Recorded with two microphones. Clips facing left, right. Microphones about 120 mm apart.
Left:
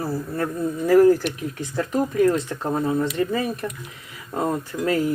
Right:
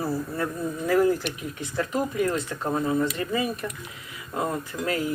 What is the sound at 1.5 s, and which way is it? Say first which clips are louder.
Speech: left 3 dB; 35° left (ahead or behind).